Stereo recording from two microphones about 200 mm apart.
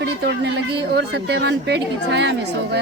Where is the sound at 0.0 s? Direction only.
55° right (ahead or behind).